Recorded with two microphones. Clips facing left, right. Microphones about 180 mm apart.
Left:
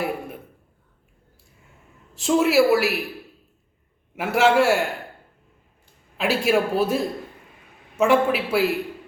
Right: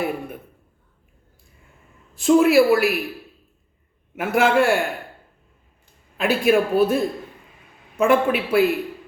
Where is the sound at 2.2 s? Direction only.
5° left (ahead or behind).